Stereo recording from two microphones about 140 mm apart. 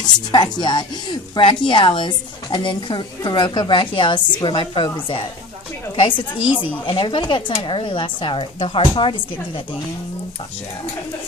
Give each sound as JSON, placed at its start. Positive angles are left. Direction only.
{"t": 0.0, "sound": "speech", "side_deg": 30}
{"t": 6.9, "sound": "speech", "side_deg": 35}